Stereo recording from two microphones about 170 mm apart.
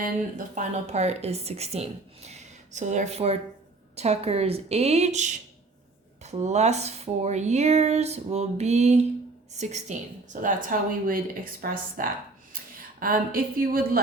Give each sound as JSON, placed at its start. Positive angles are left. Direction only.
{"t": 0.0, "sound": "a woman's voice", "side_deg": -50}
{"t": 10.4, "sound": "speech", "side_deg": -55}